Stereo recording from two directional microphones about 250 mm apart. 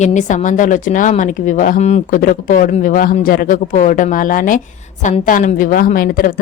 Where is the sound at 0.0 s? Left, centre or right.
Left.